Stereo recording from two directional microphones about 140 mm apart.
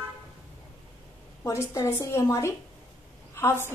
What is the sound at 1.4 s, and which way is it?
A woman's voice, 20° left (ahead or behind).